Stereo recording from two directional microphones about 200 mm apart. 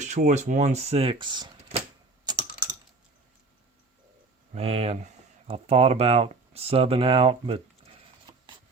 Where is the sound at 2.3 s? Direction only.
20° right (ahead or behind).